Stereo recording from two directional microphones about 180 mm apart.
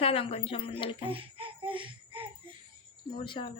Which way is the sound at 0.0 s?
30° left (ahead or behind).